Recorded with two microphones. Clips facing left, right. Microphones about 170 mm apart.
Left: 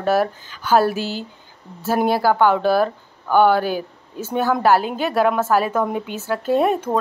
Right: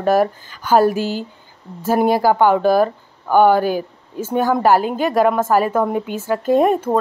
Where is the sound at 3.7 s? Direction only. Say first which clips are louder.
Right 3 dB; 45° right (ahead or behind).